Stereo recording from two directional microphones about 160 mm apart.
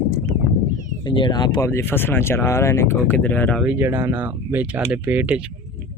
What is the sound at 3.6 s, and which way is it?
Speech, 15° right (ahead or behind).